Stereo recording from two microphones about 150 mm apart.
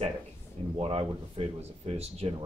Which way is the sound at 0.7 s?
40° right (ahead or behind).